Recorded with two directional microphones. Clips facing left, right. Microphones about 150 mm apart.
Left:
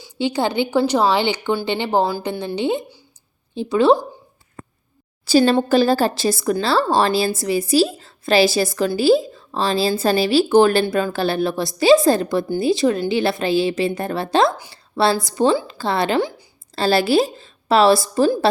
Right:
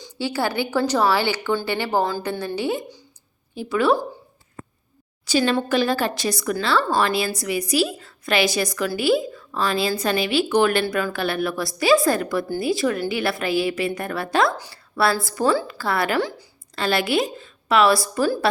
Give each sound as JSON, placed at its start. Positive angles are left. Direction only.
{"t": 0.2, "sound": "a woman's voice", "side_deg": 20}
{"t": 5.2, "sound": "a woman's voice", "side_deg": 35}